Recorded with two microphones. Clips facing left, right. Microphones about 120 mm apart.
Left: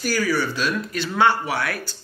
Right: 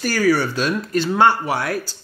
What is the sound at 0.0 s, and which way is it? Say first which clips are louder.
Speech: right 4 dB; 60° right (ahead or behind).